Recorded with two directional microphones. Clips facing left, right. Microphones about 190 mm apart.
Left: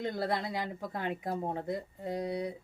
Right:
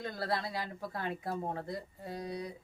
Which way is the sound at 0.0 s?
20° left (ahead or behind).